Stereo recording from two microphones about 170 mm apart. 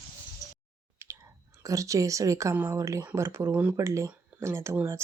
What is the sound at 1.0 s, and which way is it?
Whispering, 15° right (ahead or behind).